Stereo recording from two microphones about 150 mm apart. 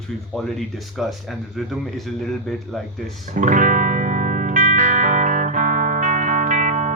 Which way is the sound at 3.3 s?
55° right (ahead or behind).